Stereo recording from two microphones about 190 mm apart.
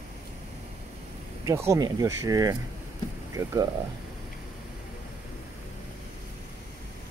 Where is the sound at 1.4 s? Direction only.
15° right (ahead or behind).